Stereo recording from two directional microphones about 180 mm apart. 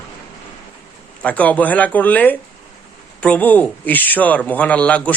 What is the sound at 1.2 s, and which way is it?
A man's voice, 10° left (ahead or behind).